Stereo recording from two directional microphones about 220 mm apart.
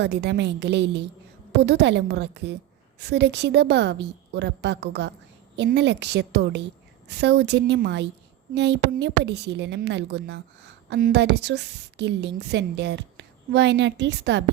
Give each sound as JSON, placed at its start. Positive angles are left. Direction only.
{"t": 0.0, "sound": "a woman's voice", "side_deg": -50}